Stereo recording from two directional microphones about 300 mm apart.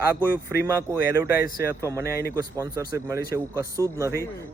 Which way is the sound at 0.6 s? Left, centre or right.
Centre.